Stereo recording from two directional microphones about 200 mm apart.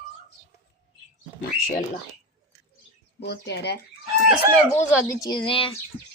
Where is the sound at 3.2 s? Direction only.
55° left (ahead or behind).